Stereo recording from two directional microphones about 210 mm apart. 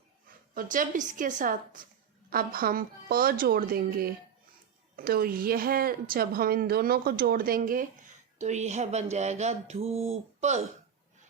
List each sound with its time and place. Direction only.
0.5 s a woman's voice: 40° right (ahead or behind)